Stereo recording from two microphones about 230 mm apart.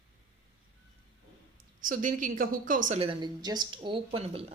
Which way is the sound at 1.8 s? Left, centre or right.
Right.